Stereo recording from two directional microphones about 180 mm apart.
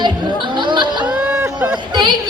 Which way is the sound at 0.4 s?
25° right (ahead or behind).